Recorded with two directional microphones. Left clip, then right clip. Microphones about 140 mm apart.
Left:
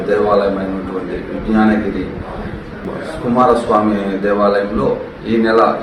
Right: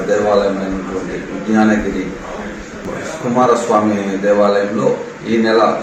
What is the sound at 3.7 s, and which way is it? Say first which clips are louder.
Speech: even; centre (ahead or behind).